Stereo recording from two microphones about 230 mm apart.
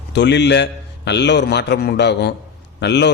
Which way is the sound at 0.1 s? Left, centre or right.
Left.